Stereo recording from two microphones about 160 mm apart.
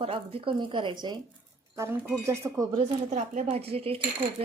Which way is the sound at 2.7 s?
50° right (ahead or behind).